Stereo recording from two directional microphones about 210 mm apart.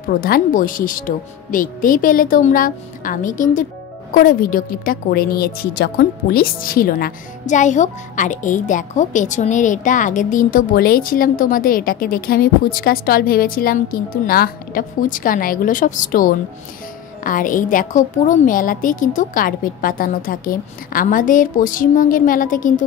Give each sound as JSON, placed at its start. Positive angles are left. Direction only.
{"t": 0.2, "sound": "a woman's voice", "side_deg": 40}